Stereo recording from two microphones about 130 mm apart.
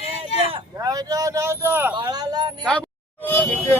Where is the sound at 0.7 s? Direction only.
25° right (ahead or behind).